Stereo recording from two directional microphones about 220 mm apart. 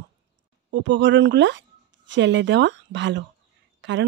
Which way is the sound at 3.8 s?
55° right (ahead or behind).